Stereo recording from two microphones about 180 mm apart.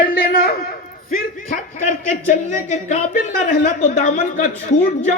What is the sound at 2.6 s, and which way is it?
Speech, 40° left (ahead or behind).